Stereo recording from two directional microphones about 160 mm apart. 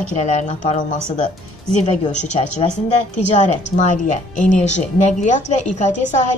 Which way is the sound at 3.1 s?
45° left (ahead or behind).